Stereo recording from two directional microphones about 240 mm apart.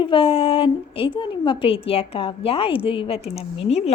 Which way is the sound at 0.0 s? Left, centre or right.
Left.